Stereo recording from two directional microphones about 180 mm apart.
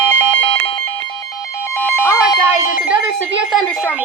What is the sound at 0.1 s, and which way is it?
Alarm, 10° left (ahead or behind).